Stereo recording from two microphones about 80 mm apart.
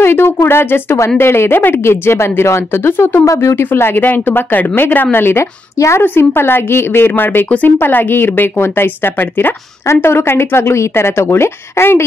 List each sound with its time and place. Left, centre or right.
0.0 s speech: left